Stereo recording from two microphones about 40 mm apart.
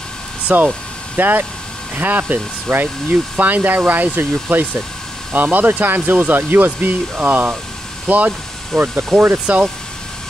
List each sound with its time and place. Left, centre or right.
0.5 s speech: right
5.3 s speech: right
9.5 s speech: right